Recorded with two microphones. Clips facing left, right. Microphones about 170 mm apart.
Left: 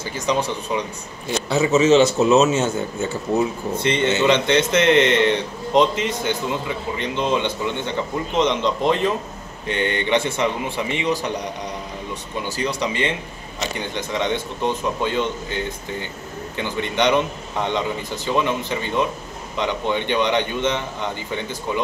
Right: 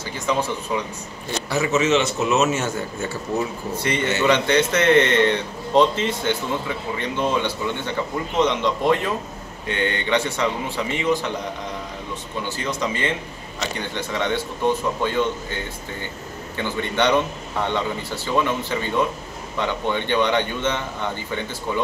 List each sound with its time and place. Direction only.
0.3 s a man's voice: 15° left (ahead or behind)
1.5 s a man's voice: 30° left (ahead or behind)
12.8 s a man's voice: 20° left (ahead or behind)
16.5 s a man's voice: 15° left (ahead or behind)